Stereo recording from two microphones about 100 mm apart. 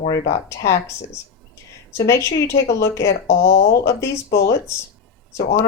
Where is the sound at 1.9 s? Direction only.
30° left (ahead or behind).